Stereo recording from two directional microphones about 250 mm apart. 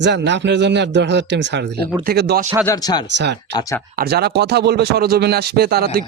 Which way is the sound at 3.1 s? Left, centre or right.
Right.